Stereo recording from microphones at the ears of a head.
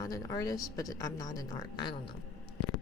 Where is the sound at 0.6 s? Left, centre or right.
Left.